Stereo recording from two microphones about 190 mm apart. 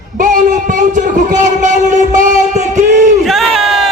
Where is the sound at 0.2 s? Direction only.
45° right (ahead or behind).